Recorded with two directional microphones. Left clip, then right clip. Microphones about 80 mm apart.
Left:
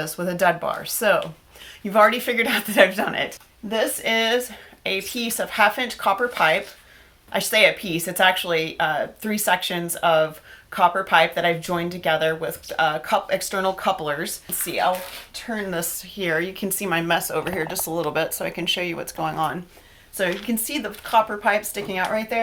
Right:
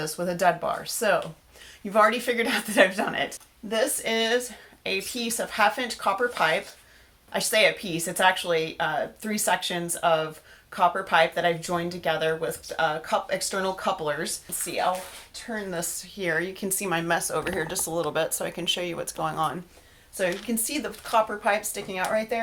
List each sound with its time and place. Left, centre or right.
0.0 s a woman's voice: left; by 22.4 s centre